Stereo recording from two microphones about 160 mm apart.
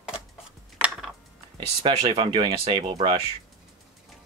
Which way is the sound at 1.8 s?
35° right (ahead or behind).